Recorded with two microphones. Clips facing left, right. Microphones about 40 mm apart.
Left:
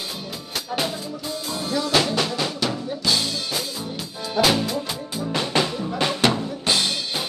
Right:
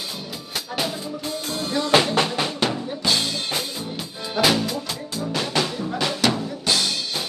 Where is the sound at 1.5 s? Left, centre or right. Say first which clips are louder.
Left 1 dB; right.